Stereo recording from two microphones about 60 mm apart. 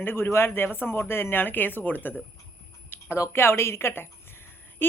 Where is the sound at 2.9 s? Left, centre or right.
Left.